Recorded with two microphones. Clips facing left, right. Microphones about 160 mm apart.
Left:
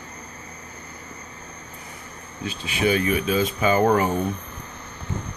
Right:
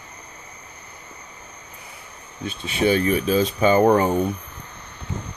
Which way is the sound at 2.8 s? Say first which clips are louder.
Right 2 dB; 35° right (ahead or behind).